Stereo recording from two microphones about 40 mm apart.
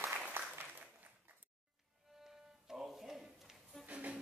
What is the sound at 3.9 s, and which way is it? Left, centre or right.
Music, right.